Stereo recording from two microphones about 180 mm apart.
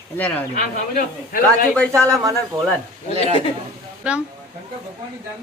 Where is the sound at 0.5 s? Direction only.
50° left (ahead or behind).